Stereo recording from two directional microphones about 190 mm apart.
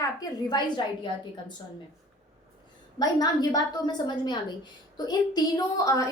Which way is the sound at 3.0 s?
20° left (ahead or behind).